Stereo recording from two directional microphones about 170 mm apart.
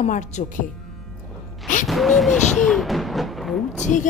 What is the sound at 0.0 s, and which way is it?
Speech, 45° left (ahead or behind).